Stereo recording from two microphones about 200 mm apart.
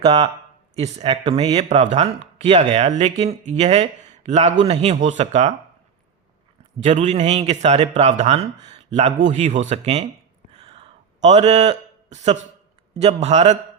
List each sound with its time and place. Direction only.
0.0 s speech: 25° right (ahead or behind)
6.8 s speech: 35° right (ahead or behind)
10.5 s a sound: 30° right (ahead or behind)
13.0 s speech: 35° right (ahead or behind)